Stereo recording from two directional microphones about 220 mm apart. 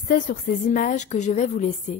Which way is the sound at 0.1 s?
40° left (ahead or behind).